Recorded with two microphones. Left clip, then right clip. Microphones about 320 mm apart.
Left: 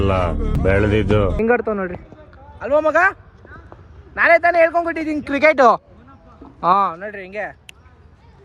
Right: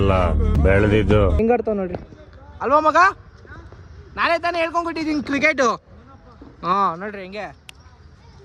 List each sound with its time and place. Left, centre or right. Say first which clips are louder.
0.0 s a man's voice: even; centre
2.6 s speech: even; centre
4.1 s a man's voice: left 7 dB; centre
6.9 s speech: left 2 dB; centre